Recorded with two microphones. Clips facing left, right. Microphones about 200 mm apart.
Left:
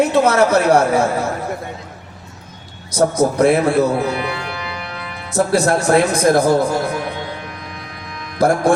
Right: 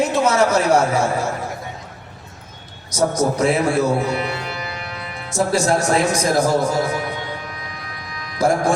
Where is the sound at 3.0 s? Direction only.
55° left (ahead or behind).